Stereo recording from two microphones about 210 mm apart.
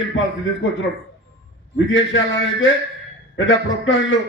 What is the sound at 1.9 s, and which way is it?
A man's voice, 65° left (ahead or behind).